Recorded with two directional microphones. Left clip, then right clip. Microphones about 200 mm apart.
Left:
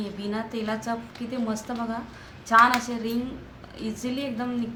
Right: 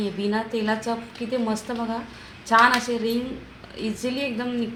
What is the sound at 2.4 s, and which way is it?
A woman's voice, 45° right (ahead or behind).